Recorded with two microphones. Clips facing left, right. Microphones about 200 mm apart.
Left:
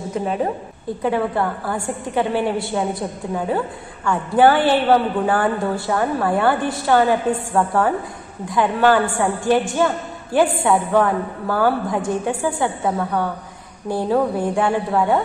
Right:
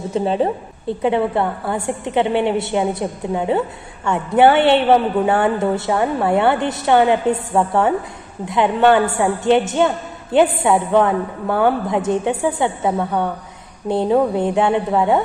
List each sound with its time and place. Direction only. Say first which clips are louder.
0.1 s a woman's voice: right 4 dB; 30° right (ahead or behind)